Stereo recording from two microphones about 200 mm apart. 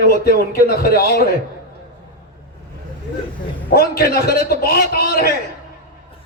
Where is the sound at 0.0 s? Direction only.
50° left (ahead or behind).